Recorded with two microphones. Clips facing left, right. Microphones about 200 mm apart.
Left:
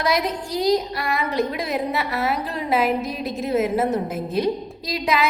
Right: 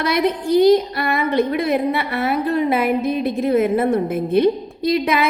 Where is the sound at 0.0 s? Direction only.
60° right (ahead or behind).